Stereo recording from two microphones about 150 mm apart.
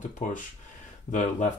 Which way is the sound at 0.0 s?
60° left (ahead or behind).